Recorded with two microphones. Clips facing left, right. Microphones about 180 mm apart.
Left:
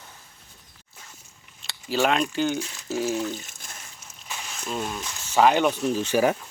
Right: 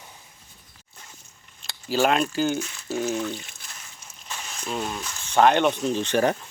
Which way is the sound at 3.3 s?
45° left (ahead or behind).